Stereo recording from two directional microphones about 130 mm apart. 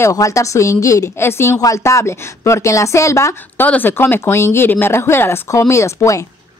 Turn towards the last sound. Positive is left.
turn(degrees=25)  # may be behind; listen again after turning